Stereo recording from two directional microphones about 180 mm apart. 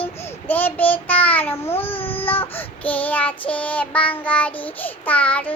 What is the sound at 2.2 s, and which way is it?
Child singing, 10° left (ahead or behind).